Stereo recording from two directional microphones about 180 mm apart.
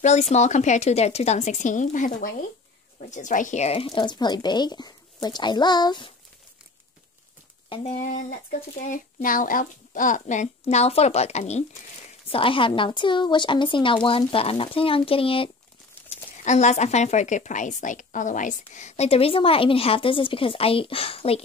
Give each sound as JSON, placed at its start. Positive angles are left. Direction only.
{"t": 0.0, "sound": "a woman's voice", "side_deg": 40}
{"t": 7.7, "sound": "a woman's voice", "side_deg": 40}